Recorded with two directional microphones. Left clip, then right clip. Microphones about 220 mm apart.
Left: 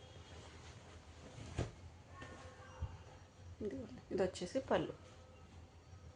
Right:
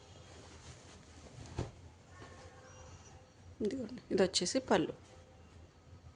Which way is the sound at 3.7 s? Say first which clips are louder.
Right 6 dB; 50° right (ahead or behind).